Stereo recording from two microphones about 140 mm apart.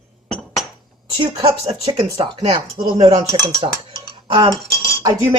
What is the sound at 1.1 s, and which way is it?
Speech, 40° right (ahead or behind).